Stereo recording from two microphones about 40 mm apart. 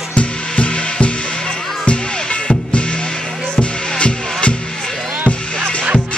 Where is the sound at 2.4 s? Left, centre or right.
Left.